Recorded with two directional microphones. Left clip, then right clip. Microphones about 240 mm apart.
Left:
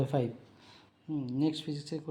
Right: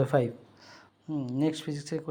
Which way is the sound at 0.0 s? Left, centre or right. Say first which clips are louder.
Right 6 dB; centre.